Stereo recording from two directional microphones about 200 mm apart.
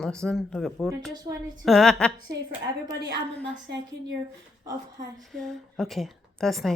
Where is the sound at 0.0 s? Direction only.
5° left (ahead or behind).